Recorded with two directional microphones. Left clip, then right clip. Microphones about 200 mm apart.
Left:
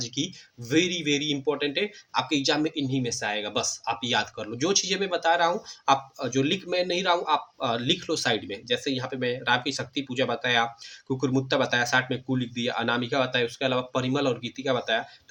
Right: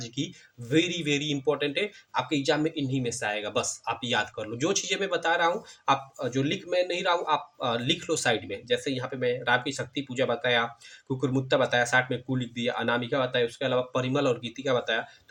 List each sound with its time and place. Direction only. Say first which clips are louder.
0.7 s speech: left 1 dB; 15° left (ahead or behind)